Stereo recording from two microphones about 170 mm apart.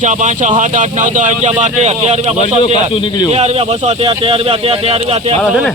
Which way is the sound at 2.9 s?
30° left (ahead or behind).